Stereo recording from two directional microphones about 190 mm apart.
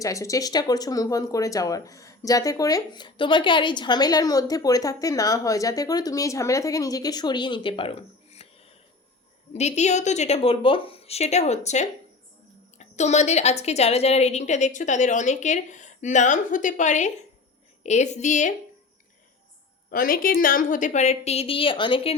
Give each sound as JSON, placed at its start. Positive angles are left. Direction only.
{"t": 0.0, "sound": "a woman's voice", "side_deg": 15}
{"t": 19.9, "sound": "a woman's voice", "side_deg": 50}